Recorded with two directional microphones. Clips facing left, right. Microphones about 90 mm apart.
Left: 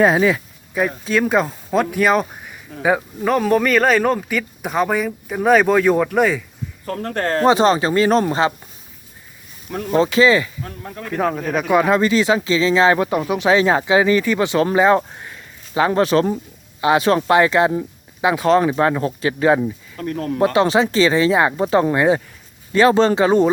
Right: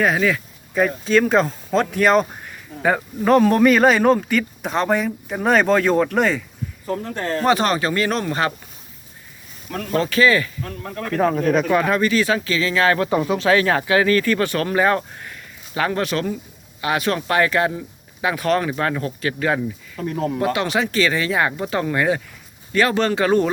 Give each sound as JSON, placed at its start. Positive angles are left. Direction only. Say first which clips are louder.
{"t": 0.0, "sound": "speech", "louder": "left 4 dB", "side_deg": 25}
{"t": 0.7, "sound": "speech", "louder": "right 2 dB", "side_deg": 5}
{"t": 6.8, "sound": "a man's voice", "louder": "left 3 dB", "side_deg": 70}
{"t": 7.4, "sound": "speech", "louder": "left 4 dB", "side_deg": 25}
{"t": 9.7, "sound": "speech", "louder": "left 4 dB", "side_deg": 20}
{"t": 11.2, "sound": "speech", "louder": "right 3 dB", "side_deg": 5}
{"t": 11.7, "sound": "speech", "louder": "left 3 dB", "side_deg": 20}
{"t": 13.1, "sound": "speech", "louder": "left 1 dB", "side_deg": 5}
{"t": 20.0, "sound": "speech", "louder": "even", "side_deg": -15}
{"t": 20.4, "sound": "speech", "louder": "left 8 dB", "side_deg": 30}